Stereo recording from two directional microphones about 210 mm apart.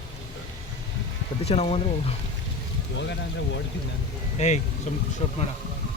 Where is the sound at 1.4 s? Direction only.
30° left (ahead or behind).